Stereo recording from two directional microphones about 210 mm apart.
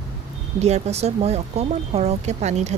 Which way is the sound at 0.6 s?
30° right (ahead or behind).